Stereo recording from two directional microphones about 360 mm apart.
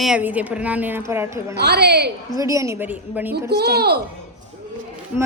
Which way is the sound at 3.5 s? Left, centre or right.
Right.